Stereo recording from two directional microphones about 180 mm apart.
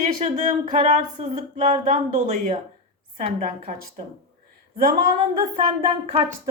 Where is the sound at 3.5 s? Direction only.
50° right (ahead or behind).